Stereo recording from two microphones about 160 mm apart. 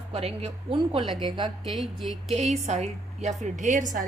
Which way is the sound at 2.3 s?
45° right (ahead or behind).